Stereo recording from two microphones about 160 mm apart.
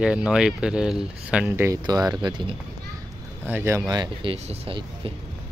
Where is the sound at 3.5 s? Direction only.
15° right (ahead or behind).